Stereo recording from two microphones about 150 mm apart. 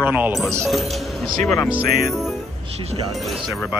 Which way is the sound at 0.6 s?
Centre (ahead or behind).